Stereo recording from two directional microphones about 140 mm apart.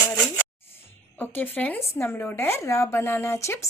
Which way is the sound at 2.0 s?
15° left (ahead or behind).